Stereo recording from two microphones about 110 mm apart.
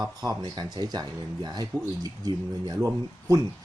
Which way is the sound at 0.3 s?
40° right (ahead or behind).